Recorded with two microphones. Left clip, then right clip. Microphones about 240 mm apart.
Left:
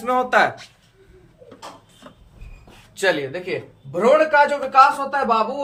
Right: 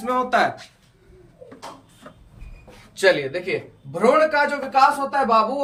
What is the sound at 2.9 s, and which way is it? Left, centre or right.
Speech, left.